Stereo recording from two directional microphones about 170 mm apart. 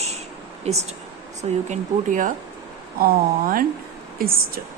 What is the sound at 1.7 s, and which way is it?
A woman's voice, 50° right (ahead or behind).